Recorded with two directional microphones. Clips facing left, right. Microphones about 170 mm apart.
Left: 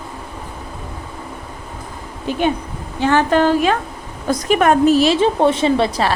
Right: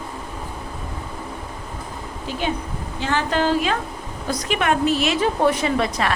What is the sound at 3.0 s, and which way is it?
Speech, 55° left (ahead or behind).